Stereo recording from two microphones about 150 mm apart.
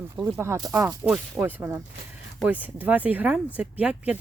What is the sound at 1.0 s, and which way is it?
Speech, 10° right (ahead or behind).